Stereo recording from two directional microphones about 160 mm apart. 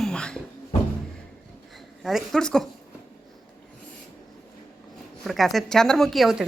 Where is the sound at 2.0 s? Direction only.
Centre (ahead or behind).